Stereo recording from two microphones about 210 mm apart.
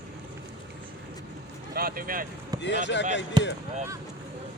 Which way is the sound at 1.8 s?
45° right (ahead or behind).